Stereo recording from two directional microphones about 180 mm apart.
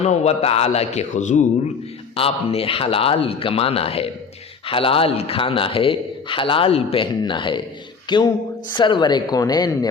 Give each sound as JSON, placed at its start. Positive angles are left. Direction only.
{"t": 0.0, "sound": "a man's voice", "side_deg": 35}
{"t": 2.1, "sound": "a man's voice", "side_deg": 30}